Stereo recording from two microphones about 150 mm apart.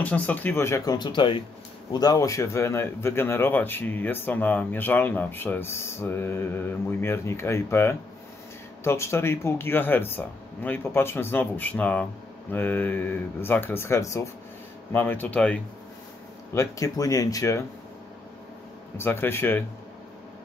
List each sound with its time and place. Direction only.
0.0 s speech: 10° left (ahead or behind)
16.5 s speech: 20° left (ahead or behind)
18.9 s speech: 15° left (ahead or behind)